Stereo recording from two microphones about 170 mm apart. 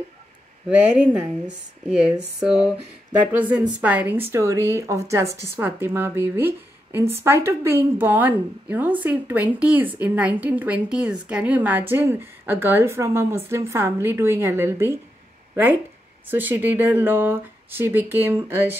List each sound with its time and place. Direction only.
0.7 s a woman's voice: 5° right (ahead or behind)